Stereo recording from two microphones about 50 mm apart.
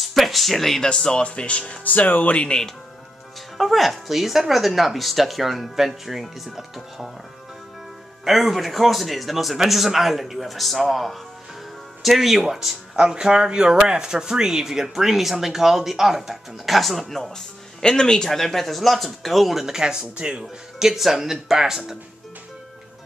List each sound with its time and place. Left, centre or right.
0.0 s a sound: centre
0.8 s speech: centre
1.9 s speech: left
2.4 s speech: centre
3.5 s speech: centre
8.3 s speech: centre
20.8 s speech: centre